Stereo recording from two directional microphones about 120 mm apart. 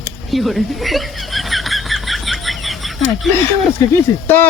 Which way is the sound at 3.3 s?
Centre (ahead or behind).